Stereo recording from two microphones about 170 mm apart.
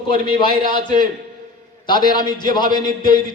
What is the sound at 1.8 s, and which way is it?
A man's voice, 25° left (ahead or behind).